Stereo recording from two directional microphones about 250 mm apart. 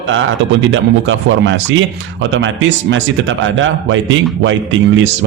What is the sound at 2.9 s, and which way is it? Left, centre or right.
A man's voice, right.